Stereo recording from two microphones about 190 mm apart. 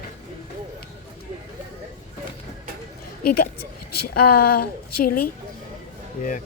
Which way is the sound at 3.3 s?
55° left (ahead or behind).